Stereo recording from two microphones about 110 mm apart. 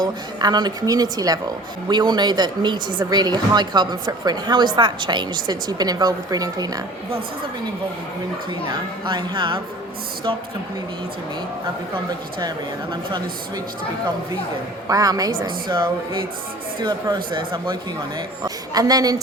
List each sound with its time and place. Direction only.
0.0 s speech: 40° right (ahead or behind)
8.7 s speech: 45° right (ahead or behind)
14.8 s speech: 35° right (ahead or behind)
15.7 s speech: 45° right (ahead or behind)
18.4 s speech: 35° right (ahead or behind)